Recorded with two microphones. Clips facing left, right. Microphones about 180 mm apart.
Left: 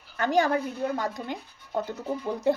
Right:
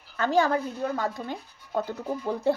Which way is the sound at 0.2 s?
15° left (ahead or behind).